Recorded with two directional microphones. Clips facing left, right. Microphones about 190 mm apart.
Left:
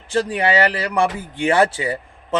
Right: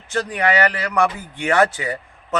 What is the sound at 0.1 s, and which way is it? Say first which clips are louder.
A man's voice: left 2 dB; 30° left (ahead or behind).